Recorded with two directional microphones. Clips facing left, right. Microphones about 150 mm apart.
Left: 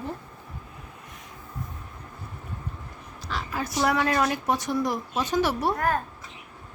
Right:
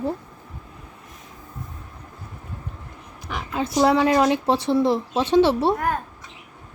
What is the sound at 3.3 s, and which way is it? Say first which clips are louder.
Speech: right 4 dB; 20° right (ahead or behind).